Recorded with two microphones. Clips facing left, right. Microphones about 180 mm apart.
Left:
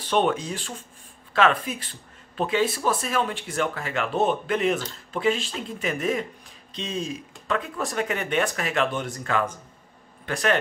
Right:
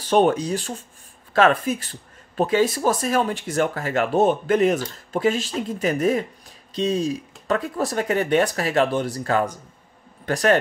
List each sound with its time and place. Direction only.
0.0 s speech: 40° right (ahead or behind)